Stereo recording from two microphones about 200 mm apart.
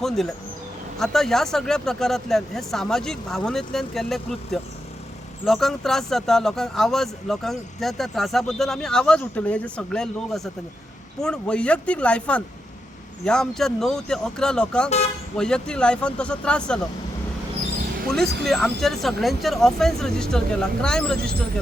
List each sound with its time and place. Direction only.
0.9 s speech: centre (ahead or behind)
18.4 s speech: centre (ahead or behind)